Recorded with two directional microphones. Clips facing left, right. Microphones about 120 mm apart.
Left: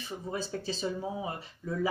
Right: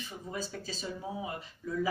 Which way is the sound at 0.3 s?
30° left (ahead or behind).